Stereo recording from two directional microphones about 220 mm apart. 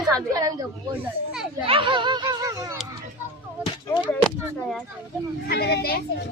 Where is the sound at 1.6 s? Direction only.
25° right (ahead or behind).